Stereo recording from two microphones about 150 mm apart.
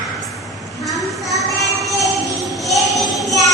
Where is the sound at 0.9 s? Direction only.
Centre (ahead or behind).